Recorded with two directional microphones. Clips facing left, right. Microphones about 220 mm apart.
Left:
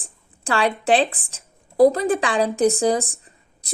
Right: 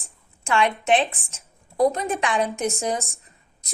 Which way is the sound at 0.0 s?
35° left (ahead or behind).